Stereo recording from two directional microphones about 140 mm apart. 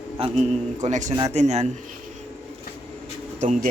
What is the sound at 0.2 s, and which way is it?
Speech, 45° right (ahead or behind).